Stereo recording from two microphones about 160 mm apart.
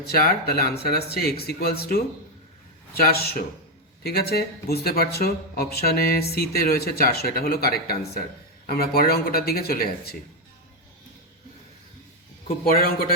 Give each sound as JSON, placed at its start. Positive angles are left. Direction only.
{"t": 0.1, "sound": "speech", "side_deg": 70}
{"t": 2.9, "sound": "speech", "side_deg": 65}
{"t": 4.0, "sound": "speech", "side_deg": 85}
{"t": 12.7, "sound": "speech", "side_deg": 70}